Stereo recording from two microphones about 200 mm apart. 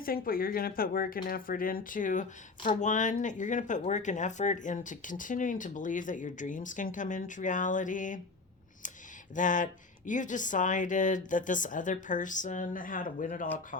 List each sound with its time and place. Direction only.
0.0 s speech: 45° left (ahead or behind)
9.3 s speech: 40° left (ahead or behind)